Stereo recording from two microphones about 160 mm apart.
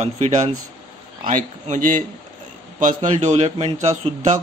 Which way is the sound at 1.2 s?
55° right (ahead or behind).